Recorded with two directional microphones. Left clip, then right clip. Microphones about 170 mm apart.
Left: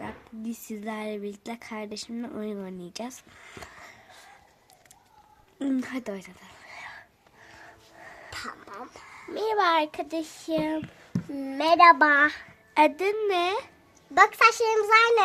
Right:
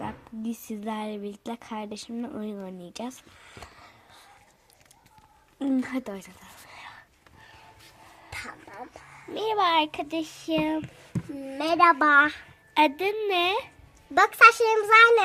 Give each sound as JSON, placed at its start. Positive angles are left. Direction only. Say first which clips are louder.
{"t": 0.0, "sound": "speech", "louder": "right 3 dB", "side_deg": 0}
{"t": 3.5, "sound": "a sound", "louder": "left 3 dB", "side_deg": 20}
{"t": 5.5, "sound": "speech", "louder": "right 2 dB", "side_deg": 20}
{"t": 5.8, "sound": "speech", "louder": "right 1 dB", "side_deg": 5}
{"t": 6.7, "sound": "whispering", "louder": "left 3 dB", "side_deg": 15}
{"t": 8.3, "sound": "a sound", "louder": "even", "side_deg": 10}
{"t": 8.7, "sound": "a sound", "louder": "left 1 dB", "side_deg": 30}
{"t": 9.3, "sound": "a child's voice", "louder": "even", "side_deg": 10}
{"t": 11.5, "sound": "a woman's voice", "louder": "left 4 dB", "side_deg": 25}
{"t": 13.0, "sound": "a woman's voice", "louder": "left 1 dB", "side_deg": 45}
{"t": 13.3, "sound": "speech", "louder": "right 1 dB", "side_deg": 0}